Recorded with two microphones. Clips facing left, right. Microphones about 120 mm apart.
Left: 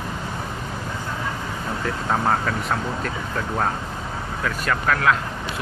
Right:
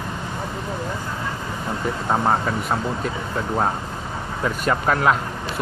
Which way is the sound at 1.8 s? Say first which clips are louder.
Right 2 dB; 15° right (ahead or behind).